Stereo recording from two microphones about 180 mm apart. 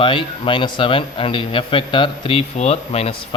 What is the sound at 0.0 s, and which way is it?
A man's voice, 30° left (ahead or behind).